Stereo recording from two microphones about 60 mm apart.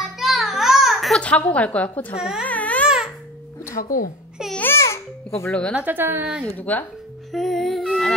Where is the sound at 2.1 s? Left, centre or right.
Centre.